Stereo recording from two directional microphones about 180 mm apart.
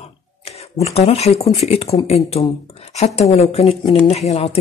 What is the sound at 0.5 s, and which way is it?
Speech, 35° left (ahead or behind).